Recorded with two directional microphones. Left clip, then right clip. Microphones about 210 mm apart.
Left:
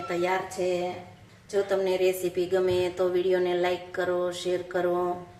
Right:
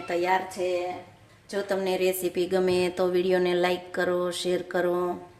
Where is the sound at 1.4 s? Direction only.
45° right (ahead or behind).